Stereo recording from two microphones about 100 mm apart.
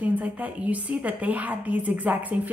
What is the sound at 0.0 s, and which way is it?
A woman's voice, 15° right (ahead or behind).